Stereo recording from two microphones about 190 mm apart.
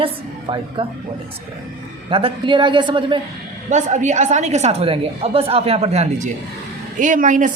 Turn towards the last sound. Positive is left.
turn(degrees=-45)  # may be behind; listen again after turning